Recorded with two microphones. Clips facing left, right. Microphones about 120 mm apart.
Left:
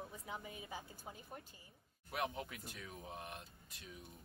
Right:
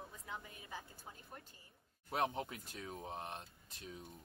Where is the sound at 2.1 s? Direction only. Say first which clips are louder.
Right 4 dB; 30° right (ahead or behind).